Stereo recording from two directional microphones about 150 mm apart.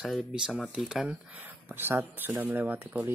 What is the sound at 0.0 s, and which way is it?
Speech, 5° right (ahead or behind).